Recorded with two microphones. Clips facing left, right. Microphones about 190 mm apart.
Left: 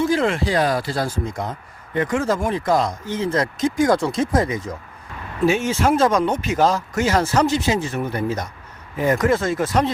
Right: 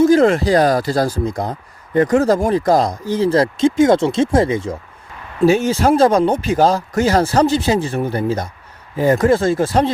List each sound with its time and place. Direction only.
0.0 s speech: 40° right (ahead or behind)